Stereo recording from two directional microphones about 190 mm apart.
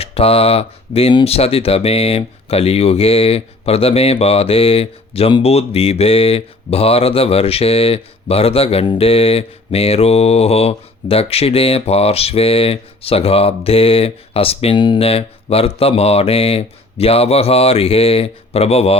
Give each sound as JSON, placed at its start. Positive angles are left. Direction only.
{"t": 0.0, "sound": "speech", "side_deg": 30}